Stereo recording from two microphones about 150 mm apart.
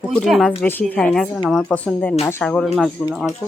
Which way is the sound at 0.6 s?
15° left (ahead or behind).